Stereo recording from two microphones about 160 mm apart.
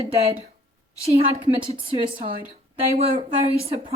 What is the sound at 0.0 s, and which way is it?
Speech, 40° right (ahead or behind).